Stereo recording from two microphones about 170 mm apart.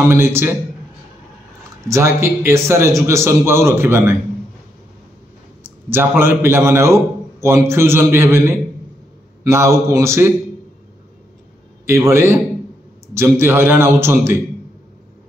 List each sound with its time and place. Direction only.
0.1 s a man's voice: 15° right (ahead or behind)
1.9 s a man's voice: 15° right (ahead or behind)
5.6 s a man's voice: 10° right (ahead or behind)
11.8 s a man's voice: 15° right (ahead or behind)